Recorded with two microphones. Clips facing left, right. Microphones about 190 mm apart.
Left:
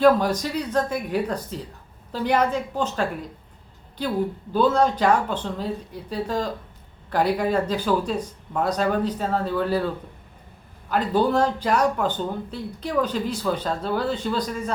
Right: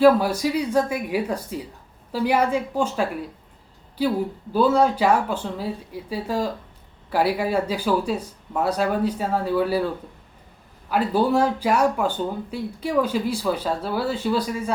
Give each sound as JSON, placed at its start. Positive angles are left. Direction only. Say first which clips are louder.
{"t": 0.0, "sound": "speech", "louder": "right 2 dB", "side_deg": -10}